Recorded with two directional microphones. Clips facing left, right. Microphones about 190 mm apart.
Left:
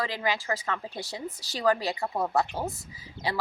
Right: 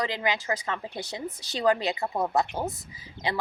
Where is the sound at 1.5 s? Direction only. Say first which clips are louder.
Right 1 dB; 20° right (ahead or behind).